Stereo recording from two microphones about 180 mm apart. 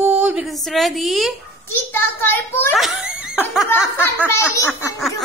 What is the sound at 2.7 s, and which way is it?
Speech, 5° right (ahead or behind).